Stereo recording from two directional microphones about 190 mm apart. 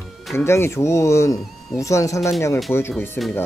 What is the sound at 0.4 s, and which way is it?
Speech, 15° left (ahead or behind).